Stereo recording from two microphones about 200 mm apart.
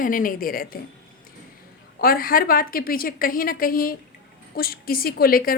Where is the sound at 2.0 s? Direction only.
45° left (ahead or behind).